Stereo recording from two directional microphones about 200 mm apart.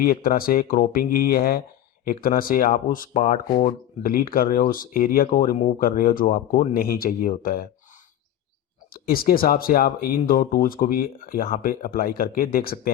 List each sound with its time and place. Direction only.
0.0 s speech: 45° left (ahead or behind)
8.9 s speech: 50° left (ahead or behind)